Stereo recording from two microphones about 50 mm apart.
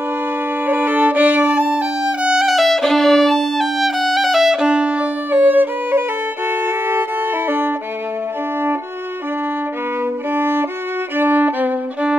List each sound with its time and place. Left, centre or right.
0.7 s violin: right
2.3 s violin: centre
4.7 s music: right
5.3 s violin: right
6.6 s music: right
10.3 s violin: right
11.1 s music: right